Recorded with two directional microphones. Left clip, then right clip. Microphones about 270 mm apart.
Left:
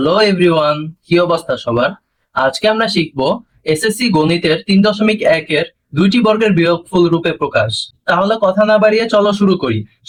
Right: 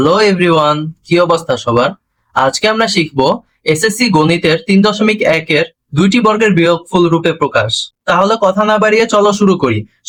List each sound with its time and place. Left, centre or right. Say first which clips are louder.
0.0 s speech: right 2 dB; centre